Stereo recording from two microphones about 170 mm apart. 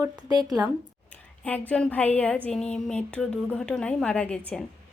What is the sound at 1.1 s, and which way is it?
A woman's voice, 10° left (ahead or behind).